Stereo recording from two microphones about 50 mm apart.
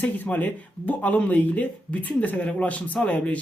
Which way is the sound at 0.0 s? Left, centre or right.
Left.